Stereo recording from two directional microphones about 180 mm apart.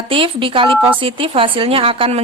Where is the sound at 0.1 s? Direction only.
30° right (ahead or behind).